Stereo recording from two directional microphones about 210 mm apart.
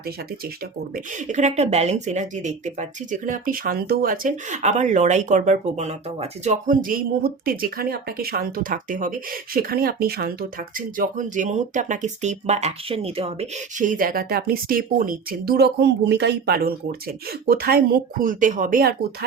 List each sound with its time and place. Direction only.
0.9 s speech: 35° right (ahead or behind)